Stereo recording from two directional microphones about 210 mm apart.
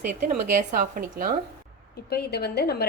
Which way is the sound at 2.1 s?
50° left (ahead or behind).